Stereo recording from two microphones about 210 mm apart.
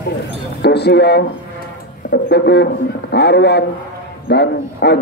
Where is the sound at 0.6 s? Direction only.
50° left (ahead or behind).